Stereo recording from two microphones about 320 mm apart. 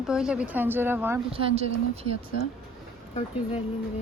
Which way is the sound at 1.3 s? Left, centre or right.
Centre.